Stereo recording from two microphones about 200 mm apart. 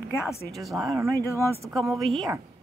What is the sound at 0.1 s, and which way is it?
Speech, 10° left (ahead or behind).